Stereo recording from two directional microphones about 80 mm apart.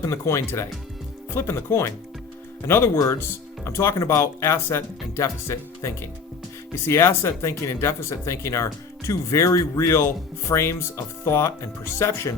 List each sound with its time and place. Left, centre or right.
0.0 s speech: left